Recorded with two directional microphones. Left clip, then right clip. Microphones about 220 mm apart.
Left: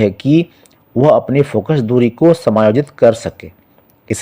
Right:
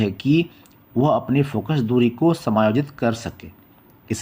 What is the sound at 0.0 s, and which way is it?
Speech, 35° left (ahead or behind).